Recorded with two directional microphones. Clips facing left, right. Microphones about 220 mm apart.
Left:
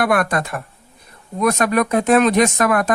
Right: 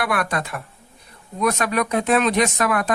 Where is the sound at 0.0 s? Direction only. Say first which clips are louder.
Left 5 dB; 45° left (ahead or behind).